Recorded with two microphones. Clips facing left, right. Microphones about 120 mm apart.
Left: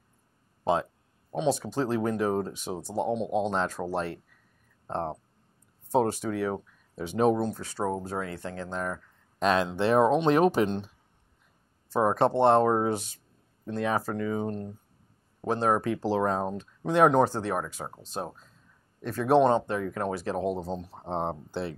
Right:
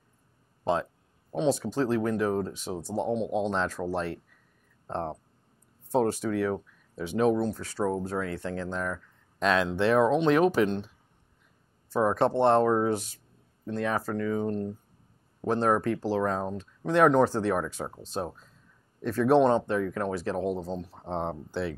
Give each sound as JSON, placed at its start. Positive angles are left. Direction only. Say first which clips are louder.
{"t": 1.3, "sound": "speech", "louder": "right 1 dB", "side_deg": 10}
{"t": 8.8, "sound": "speech", "louder": "even", "side_deg": 20}
{"t": 11.9, "sound": "speech", "louder": "left 1 dB", "side_deg": 20}
{"t": 16.0, "sound": "speech", "louder": "left 1 dB", "side_deg": 20}